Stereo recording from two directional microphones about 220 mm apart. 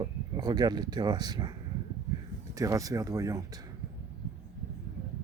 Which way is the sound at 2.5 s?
15° right (ahead or behind).